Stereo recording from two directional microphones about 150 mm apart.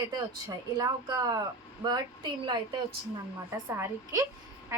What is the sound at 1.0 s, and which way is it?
Speech, 25° right (ahead or behind).